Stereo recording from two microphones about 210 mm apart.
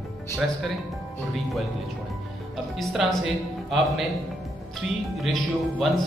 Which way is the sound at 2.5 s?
Centre (ahead or behind).